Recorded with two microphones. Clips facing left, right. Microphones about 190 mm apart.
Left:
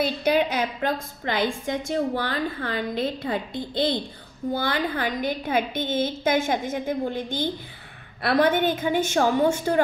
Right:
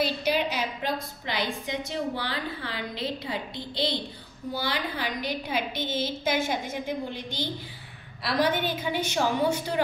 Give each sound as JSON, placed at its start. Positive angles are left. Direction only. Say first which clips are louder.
{"t": 0.0, "sound": "a woman's voice", "louder": "left 4 dB", "side_deg": 50}